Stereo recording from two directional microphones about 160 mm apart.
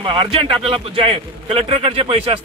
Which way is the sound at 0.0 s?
30° right (ahead or behind).